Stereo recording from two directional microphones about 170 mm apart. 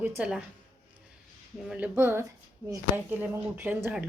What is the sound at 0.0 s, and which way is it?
Speech, 5° right (ahead or behind).